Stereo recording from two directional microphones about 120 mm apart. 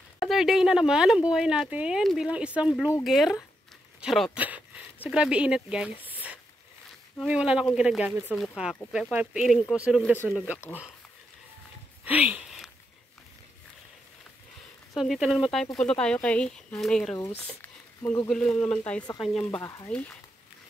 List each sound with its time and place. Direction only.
0.2 s speech: centre (ahead or behind)
4.4 s a sound: 10° right (ahead or behind)
5.0 s speech: 10° right (ahead or behind)
12.0 s speech: 15° right (ahead or behind)
12.4 s a sound: centre (ahead or behind)
15.0 s speech: 5° right (ahead or behind)
18.3 s speech: 5° left (ahead or behind)
19.6 s speech: 30° left (ahead or behind)
19.9 s speech: 10° left (ahead or behind)